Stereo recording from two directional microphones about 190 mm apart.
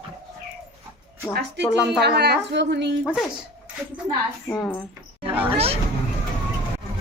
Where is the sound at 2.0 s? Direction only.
60° right (ahead or behind).